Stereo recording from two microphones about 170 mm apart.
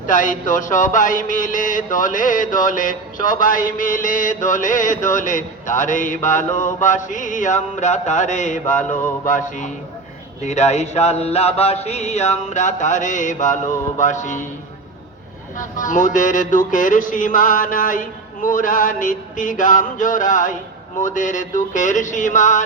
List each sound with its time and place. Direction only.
0.1 s mantra: 50° left (ahead or behind)
10.4 s a sound: 40° left (ahead or behind)
14.0 s mantra: 45° left (ahead or behind)
15.5 s mantra: 50° left (ahead or behind)